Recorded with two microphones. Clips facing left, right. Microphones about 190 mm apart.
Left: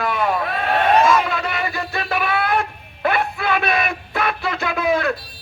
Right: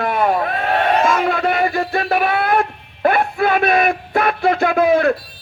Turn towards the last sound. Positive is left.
turn(degrees=-50)  # may be behind; listen again after turning